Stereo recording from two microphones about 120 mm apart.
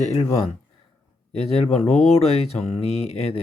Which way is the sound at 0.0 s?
65° left (ahead or behind).